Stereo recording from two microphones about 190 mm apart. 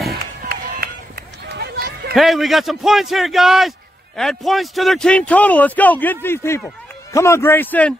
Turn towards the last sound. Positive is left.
turn(degrees=10)  # may be behind; listen again after turning